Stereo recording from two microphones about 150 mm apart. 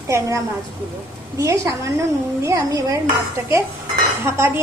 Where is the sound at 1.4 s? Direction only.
20° right (ahead or behind).